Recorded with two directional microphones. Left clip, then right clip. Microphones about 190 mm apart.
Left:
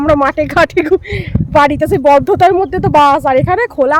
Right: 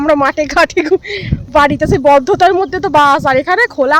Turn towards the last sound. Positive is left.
turn(degrees=5)  # may be behind; listen again after turning